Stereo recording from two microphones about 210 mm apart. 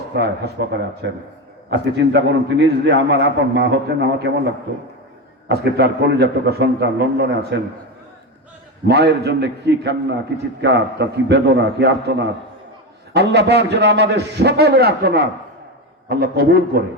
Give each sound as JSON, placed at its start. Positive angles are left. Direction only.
{"t": 0.2, "sound": "a man's voice", "side_deg": -55}
{"t": 5.5, "sound": "a man's voice", "side_deg": -50}
{"t": 8.9, "sound": "a man's voice", "side_deg": -50}